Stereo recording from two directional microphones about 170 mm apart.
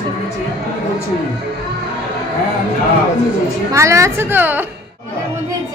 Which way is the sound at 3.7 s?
15° right (ahead or behind).